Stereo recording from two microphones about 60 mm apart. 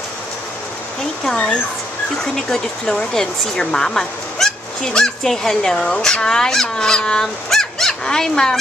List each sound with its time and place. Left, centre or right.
1.3 s speech: centre